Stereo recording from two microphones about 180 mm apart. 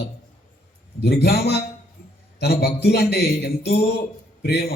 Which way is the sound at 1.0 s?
65° left (ahead or behind).